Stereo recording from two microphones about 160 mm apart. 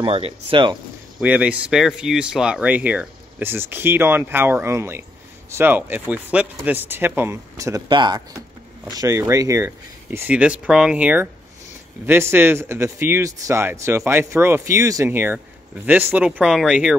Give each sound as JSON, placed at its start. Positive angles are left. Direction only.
{"t": 0.0, "sound": "speech", "side_deg": -35}
{"t": 1.2, "sound": "speech", "side_deg": -10}